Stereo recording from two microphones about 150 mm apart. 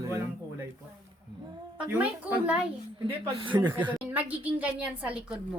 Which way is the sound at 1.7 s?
10° right (ahead or behind).